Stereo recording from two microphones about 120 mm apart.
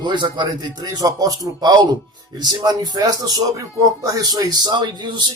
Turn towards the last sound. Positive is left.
turn(degrees=-40)  # may be behind; listen again after turning